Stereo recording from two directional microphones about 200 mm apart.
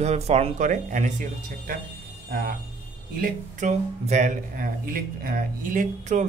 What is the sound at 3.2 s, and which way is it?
Speech, 40° right (ahead or behind).